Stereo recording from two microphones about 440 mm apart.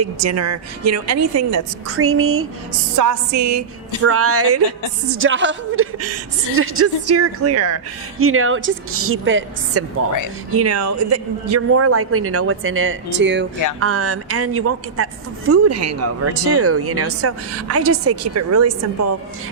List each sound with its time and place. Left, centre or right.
0.0 s a woman's voice: right
3.0 s a woman's voice: right